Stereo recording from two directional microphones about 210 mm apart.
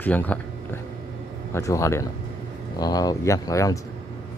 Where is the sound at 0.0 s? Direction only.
5° left (ahead or behind).